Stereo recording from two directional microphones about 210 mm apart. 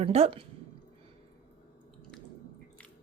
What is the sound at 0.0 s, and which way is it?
Speech, 30° right (ahead or behind).